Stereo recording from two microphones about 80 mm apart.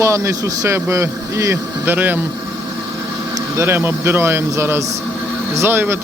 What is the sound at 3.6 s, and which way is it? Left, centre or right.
Speech, right.